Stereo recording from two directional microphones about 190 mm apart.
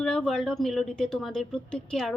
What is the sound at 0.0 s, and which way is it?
Speech, 5° left (ahead or behind).